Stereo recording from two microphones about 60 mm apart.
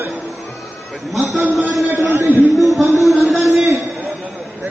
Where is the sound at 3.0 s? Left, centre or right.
Centre.